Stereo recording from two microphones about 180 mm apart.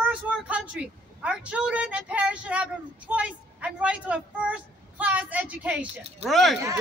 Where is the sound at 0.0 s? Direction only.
5° right (ahead or behind).